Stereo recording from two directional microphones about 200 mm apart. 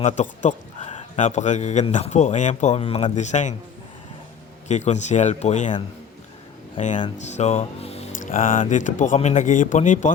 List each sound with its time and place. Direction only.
0.0 s a man's voice: 35° left (ahead or behind)
4.7 s a man's voice: 35° left (ahead or behind)
6.7 s a man's voice: 35° left (ahead or behind)